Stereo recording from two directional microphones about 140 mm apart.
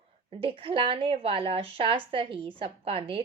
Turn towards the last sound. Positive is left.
turn(degrees=-40)  # may be behind; listen again after turning